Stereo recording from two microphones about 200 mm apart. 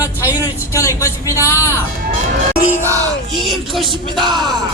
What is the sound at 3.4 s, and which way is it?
Speech, centre (ahead or behind).